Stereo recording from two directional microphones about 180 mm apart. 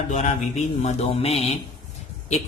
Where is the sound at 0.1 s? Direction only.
40° left (ahead or behind).